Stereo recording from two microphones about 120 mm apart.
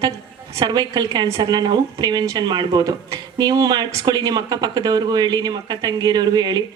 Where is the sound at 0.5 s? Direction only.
35° right (ahead or behind).